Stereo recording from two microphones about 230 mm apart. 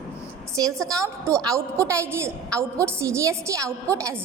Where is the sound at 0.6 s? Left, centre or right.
Centre.